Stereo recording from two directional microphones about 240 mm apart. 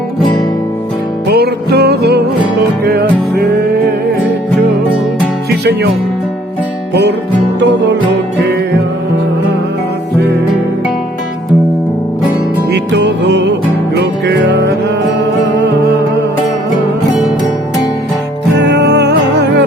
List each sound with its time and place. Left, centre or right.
1.3 s music: right
5.5 s music: right
7.6 s music: right
12.7 s music: right
18.6 s music: right